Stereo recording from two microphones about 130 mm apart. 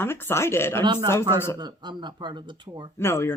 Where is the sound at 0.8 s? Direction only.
35° right (ahead or behind).